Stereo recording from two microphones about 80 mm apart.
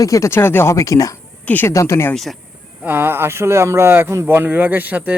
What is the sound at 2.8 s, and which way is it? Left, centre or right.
Speech, right.